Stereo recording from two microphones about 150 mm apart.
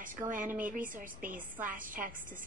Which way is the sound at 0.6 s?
65° right (ahead or behind).